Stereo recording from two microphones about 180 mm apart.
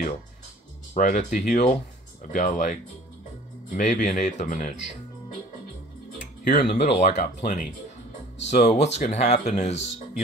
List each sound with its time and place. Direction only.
0.9 s speech: 45° left (ahead or behind)
6.4 s speech: 65° left (ahead or behind)
7.0 s speech: 45° left (ahead or behind)